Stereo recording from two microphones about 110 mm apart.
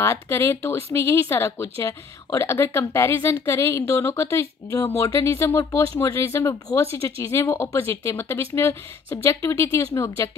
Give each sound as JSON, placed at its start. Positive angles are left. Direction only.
{"t": 0.0, "sound": "speech", "side_deg": 25}